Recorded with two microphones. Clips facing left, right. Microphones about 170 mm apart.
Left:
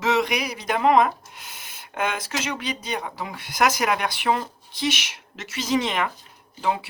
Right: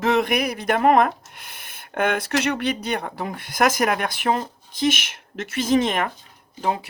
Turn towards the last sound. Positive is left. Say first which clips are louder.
# right 1 dB
turn(degrees=-45)  # may be behind; listen again after turning